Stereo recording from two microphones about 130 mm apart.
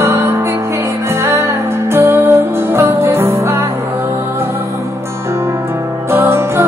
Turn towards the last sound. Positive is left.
turn(degrees=-20)  # may be behind; listen again after turning